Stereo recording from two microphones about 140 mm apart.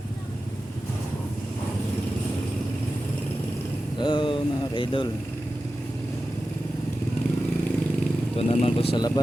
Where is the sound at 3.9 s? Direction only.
35° left (ahead or behind).